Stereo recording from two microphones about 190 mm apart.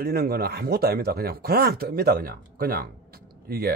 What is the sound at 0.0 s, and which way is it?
Speech, 55° right (ahead or behind).